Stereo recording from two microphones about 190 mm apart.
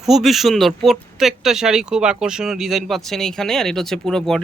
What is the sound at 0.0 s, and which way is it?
Speech, centre (ahead or behind).